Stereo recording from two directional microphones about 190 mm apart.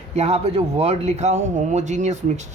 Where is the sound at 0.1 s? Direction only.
35° right (ahead or behind).